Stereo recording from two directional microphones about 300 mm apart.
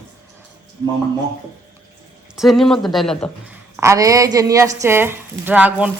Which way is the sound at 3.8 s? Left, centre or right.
Centre.